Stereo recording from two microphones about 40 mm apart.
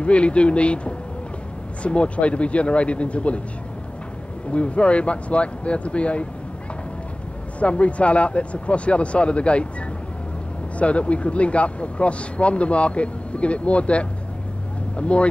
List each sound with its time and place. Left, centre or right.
0.0 s speech: left
4.5 s speech: left
7.6 s speech: left
10.8 s speech: left